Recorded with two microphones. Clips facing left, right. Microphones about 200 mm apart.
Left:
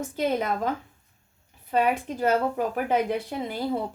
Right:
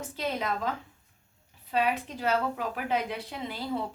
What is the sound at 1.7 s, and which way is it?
A woman's voice, 50° left (ahead or behind).